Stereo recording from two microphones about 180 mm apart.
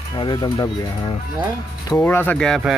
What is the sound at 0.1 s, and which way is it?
Speech, 25° left (ahead or behind).